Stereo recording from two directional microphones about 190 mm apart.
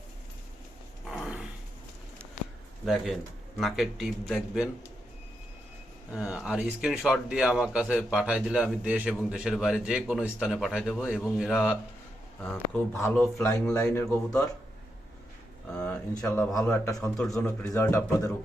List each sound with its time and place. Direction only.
1.0 s a sound: centre (ahead or behind)
2.8 s speech: centre (ahead or behind)
6.1 s speech: 5° right (ahead or behind)
15.7 s a sound: 10° left (ahead or behind)
16.2 s speech: 5° left (ahead or behind)
16.8 s speech: 15° left (ahead or behind)